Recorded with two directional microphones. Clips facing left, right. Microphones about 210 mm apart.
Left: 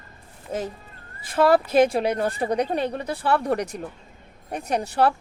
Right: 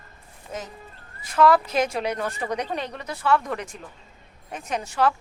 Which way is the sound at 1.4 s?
30° left (ahead or behind).